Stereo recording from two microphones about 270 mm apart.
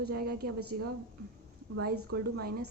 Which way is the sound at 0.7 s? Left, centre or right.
Right.